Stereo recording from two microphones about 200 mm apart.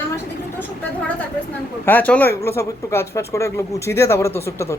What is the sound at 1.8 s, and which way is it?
Speech, 10° left (ahead or behind).